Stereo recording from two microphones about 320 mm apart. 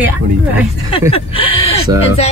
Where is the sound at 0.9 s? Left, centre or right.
Centre.